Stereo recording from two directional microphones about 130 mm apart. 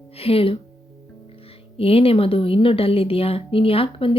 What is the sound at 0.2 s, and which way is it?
Speech, 45° left (ahead or behind).